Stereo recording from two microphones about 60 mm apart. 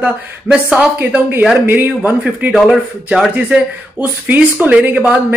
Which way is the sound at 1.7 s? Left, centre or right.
Right.